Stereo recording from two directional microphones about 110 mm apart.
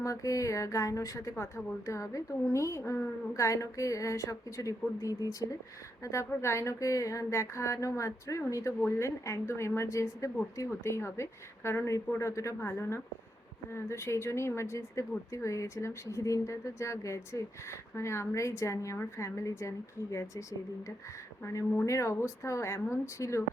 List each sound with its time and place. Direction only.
0.0 s a woman's voice: 30° left (ahead or behind)